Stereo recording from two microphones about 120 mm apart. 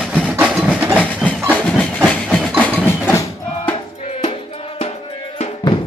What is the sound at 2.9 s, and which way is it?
Music, 15° left (ahead or behind).